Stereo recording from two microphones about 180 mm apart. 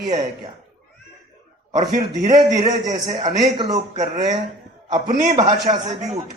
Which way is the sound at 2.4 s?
20° right (ahead or behind).